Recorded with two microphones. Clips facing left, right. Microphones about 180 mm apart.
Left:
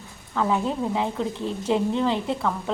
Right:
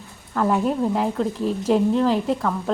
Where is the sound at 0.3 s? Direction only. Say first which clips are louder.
Right 3 dB; 5° right (ahead or behind).